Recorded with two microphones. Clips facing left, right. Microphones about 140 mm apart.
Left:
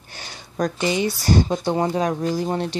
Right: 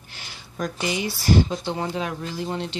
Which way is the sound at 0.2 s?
40° left (ahead or behind).